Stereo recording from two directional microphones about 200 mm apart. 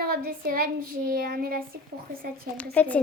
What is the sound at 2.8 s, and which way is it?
Speech, 5° left (ahead or behind).